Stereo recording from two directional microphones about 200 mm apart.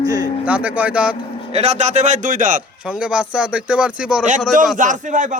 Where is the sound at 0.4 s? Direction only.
5° right (ahead or behind).